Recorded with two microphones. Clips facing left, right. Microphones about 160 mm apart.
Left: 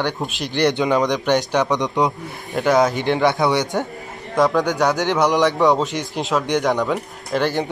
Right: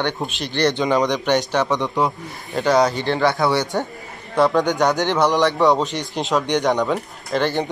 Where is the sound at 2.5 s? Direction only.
Centre (ahead or behind).